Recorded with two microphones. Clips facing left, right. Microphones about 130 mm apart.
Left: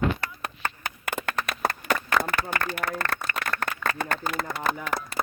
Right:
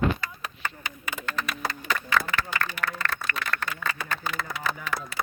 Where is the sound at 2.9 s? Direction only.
55° left (ahead or behind).